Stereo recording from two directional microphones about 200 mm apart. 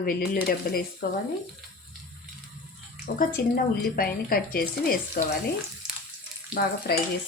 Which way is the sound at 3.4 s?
50° left (ahead or behind).